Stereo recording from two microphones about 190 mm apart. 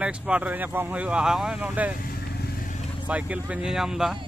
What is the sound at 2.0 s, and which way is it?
Vehicle, 50° left (ahead or behind).